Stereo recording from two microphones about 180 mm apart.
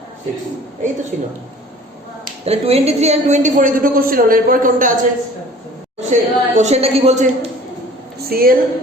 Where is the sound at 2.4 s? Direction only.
35° right (ahead or behind).